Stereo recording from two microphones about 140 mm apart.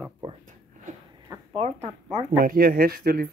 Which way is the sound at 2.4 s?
90° right.